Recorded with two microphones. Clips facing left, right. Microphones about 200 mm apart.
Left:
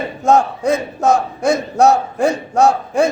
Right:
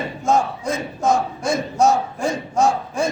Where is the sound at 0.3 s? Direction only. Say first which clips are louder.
Left 6 dB; 65° left (ahead or behind).